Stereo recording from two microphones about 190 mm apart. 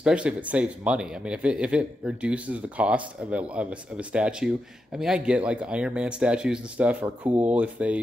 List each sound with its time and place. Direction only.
0.0 s speech: 5° right (ahead or behind)